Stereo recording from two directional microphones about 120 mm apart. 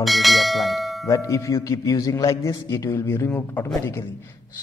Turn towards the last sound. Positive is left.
turn(degrees=15)  # may be behind; listen again after turning